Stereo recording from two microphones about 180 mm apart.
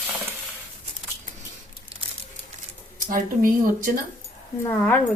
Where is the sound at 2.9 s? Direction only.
50° right (ahead or behind).